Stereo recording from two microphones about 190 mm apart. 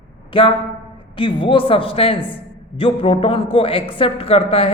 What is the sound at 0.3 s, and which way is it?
A woman's voice, 25° left (ahead or behind).